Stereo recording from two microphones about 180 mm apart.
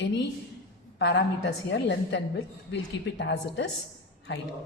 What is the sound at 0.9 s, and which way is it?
Speech, 75° left (ahead or behind).